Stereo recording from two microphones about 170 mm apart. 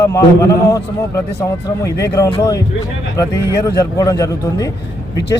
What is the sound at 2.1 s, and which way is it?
Speech, 20° left (ahead or behind).